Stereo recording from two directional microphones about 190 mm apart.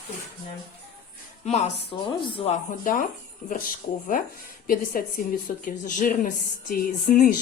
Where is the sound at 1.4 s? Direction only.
35° left (ahead or behind).